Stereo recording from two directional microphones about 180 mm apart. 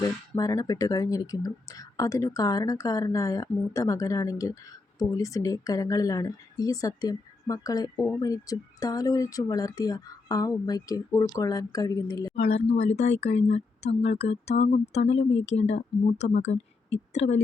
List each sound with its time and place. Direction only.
0.0 s speech: 20° left (ahead or behind)
12.4 s speech: 35° left (ahead or behind)